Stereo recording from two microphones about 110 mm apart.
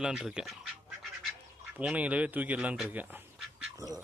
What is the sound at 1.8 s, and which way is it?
Speech, 10° right (ahead or behind).